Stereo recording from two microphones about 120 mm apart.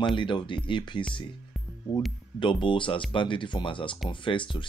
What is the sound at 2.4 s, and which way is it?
Speech, 45° left (ahead or behind).